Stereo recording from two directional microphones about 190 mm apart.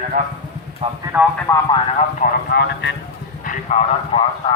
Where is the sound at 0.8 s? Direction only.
30° right (ahead or behind).